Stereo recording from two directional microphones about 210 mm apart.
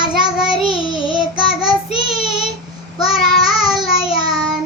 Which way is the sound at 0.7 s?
25° left (ahead or behind).